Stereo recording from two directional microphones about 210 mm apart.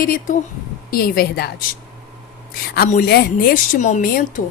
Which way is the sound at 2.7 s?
45° left (ahead or behind).